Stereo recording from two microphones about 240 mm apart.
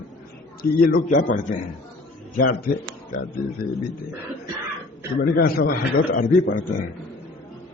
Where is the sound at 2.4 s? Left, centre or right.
Left.